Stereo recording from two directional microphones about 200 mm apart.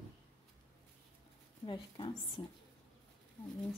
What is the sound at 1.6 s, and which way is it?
Speech, 25° left (ahead or behind).